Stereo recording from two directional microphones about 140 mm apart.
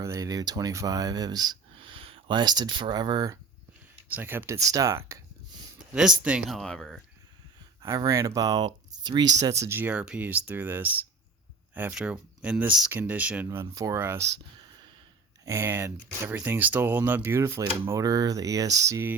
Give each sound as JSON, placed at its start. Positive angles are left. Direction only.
{"t": 0.0, "sound": "speech", "side_deg": -25}
{"t": 1.7, "sound": "speech", "side_deg": -40}
{"t": 4.1, "sound": "speech", "side_deg": -15}
{"t": 5.9, "sound": "speech", "side_deg": -5}
{"t": 7.8, "sound": "speech", "side_deg": -25}
{"t": 15.4, "sound": "speech", "side_deg": -20}